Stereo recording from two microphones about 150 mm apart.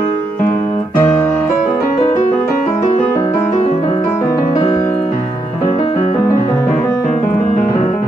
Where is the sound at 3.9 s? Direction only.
30° left (ahead or behind).